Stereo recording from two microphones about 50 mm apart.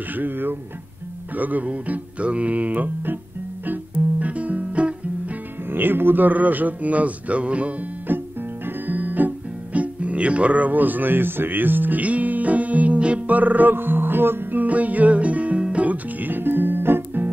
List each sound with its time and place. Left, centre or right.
0.1 s speech: right
3.6 s music: right
5.7 s speech: right
8.1 s music: right
13.4 s music: right